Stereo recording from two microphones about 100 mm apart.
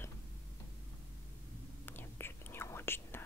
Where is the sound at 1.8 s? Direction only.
20° left (ahead or behind).